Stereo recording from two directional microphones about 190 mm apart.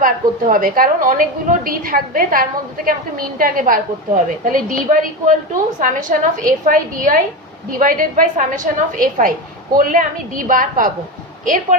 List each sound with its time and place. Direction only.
0.0 s a woman's voice: 45° right (ahead or behind)